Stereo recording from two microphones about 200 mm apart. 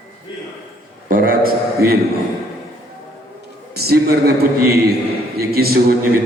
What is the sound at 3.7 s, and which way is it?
A man's voice, 50° right (ahead or behind).